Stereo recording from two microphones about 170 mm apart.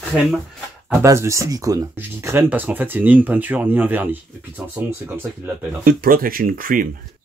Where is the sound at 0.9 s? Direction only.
15° right (ahead or behind).